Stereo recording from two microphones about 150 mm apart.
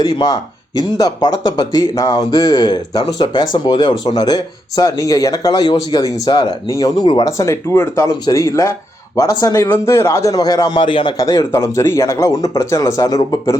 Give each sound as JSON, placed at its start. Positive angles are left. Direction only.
{"t": 0.0, "sound": "a man's voice", "side_deg": 25}
{"t": 11.2, "sound": "a man's voice", "side_deg": 20}